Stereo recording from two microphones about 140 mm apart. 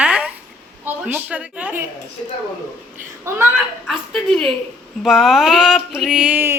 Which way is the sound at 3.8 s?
5° left (ahead or behind).